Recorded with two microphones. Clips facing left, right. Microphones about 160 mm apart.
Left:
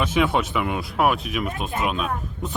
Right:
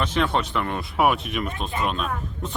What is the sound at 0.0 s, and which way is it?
Speech, 10° left (ahead or behind).